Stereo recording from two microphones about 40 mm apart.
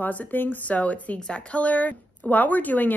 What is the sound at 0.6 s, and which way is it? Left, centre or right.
A woman's voice, left.